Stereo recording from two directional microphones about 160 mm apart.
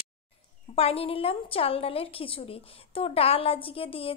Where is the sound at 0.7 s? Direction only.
35° left (ahead or behind).